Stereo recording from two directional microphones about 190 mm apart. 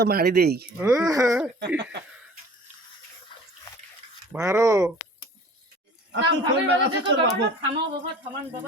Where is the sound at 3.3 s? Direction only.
25° left (ahead or behind).